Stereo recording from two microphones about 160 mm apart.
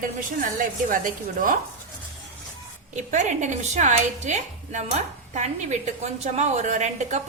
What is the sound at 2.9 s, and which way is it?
Speech, 50° right (ahead or behind).